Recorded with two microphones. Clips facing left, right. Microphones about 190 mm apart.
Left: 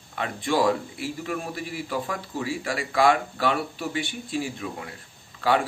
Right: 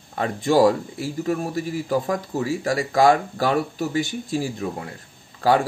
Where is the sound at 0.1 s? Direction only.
40° right (ahead or behind).